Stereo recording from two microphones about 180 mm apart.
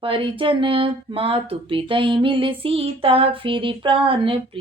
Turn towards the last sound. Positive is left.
turn(degrees=-30)  # may be behind; listen again after turning